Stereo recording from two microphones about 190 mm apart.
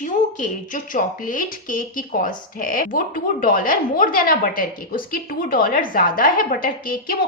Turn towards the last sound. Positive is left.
turn(degrees=45)  # may be behind; listen again after turning